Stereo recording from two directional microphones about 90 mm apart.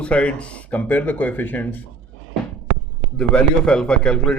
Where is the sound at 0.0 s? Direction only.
15° left (ahead or behind).